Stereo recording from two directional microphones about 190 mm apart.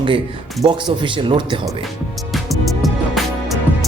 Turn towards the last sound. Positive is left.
turn(degrees=0)  # may be behind; listen again after turning